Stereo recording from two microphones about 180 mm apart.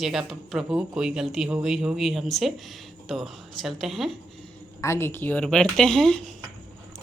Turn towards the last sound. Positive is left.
turn(degrees=5)  # may be behind; listen again after turning